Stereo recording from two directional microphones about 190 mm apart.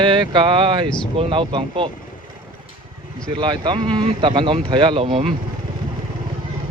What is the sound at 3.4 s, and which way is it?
Speech, 25° right (ahead or behind).